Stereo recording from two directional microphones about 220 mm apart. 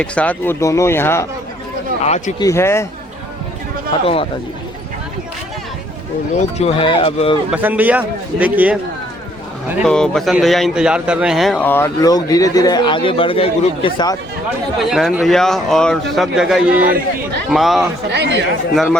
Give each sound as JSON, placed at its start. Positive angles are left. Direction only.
{"t": 0.0, "sound": "speech", "side_deg": 5}
{"t": 2.0, "sound": "speech", "side_deg": 30}
{"t": 2.4, "sound": "speech", "side_deg": 10}
{"t": 4.0, "sound": "speech", "side_deg": 25}
{"t": 6.6, "sound": "speech", "side_deg": 25}
{"t": 7.5, "sound": "a man's voice", "side_deg": -5}
{"t": 14.8, "sound": "speech", "side_deg": 0}
{"t": 18.1, "sound": "speech", "side_deg": -50}